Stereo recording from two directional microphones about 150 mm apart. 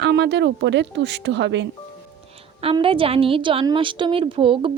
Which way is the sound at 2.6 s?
40° right (ahead or behind).